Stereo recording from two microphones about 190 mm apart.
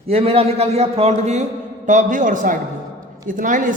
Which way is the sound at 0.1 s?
30° right (ahead or behind).